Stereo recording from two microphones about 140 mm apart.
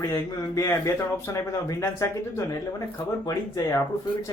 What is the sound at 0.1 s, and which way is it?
Speech, 20° left (ahead or behind).